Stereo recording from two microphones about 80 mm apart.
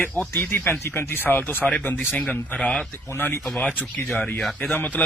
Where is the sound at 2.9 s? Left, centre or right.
Left.